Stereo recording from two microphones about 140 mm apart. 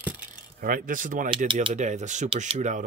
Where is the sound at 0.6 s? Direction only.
80° right.